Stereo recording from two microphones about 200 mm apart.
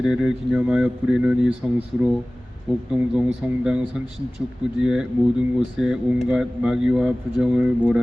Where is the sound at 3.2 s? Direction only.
5° right (ahead or behind).